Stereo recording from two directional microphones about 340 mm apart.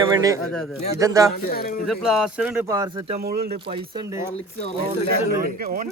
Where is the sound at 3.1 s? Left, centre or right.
Right.